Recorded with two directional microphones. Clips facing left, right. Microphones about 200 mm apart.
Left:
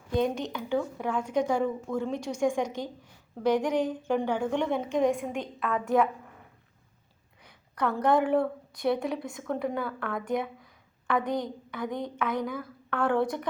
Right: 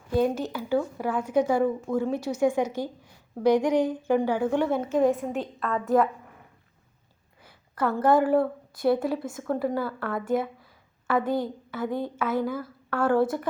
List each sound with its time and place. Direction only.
0.1 s a woman's voice: 5° right (ahead or behind)
7.4 s a woman's voice: 5° right (ahead or behind)